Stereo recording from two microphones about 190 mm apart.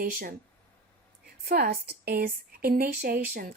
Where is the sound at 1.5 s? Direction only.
55° right (ahead or behind).